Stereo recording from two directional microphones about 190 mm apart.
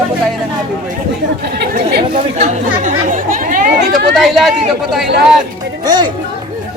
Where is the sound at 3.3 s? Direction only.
45° right (ahead or behind).